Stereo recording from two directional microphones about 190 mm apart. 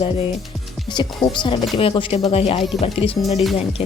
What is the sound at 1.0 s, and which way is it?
Speech, 25° left (ahead or behind).